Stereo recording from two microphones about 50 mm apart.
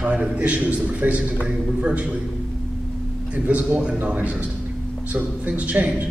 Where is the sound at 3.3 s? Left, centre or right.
Right.